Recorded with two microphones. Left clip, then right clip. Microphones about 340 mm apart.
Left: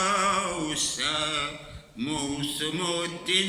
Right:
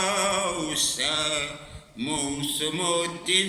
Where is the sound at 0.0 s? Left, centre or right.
Centre.